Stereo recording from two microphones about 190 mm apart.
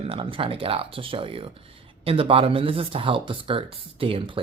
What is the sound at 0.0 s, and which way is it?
Speech, 30° right (ahead or behind).